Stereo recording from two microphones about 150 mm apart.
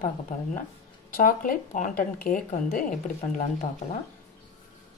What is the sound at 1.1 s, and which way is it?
Speech, 65° left (ahead or behind).